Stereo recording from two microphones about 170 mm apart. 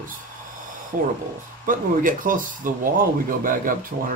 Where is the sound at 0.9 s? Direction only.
50° right (ahead or behind).